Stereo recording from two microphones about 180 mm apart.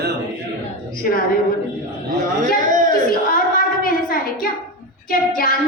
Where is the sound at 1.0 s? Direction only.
55° left (ahead or behind).